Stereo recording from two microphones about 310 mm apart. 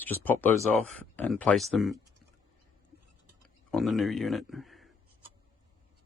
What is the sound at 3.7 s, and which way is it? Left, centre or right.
Speech, centre.